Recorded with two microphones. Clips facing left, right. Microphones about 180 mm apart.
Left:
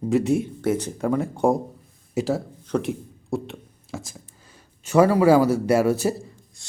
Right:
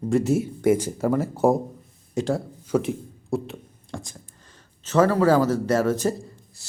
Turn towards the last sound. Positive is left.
turn(degrees=10)  # may be behind; listen again after turning